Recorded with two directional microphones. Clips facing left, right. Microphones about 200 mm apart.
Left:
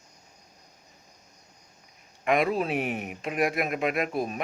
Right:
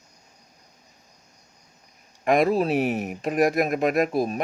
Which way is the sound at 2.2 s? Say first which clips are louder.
Right 5 dB; 40° right (ahead or behind).